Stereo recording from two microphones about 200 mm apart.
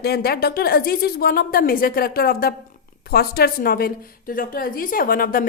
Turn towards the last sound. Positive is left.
turn(degrees=45)  # may be behind; listen again after turning